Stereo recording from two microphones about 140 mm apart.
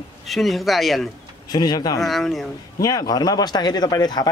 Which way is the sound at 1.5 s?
30° left (ahead or behind).